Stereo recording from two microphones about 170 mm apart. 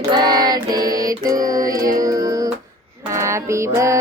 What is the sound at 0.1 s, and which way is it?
Female singing, 25° right (ahead or behind).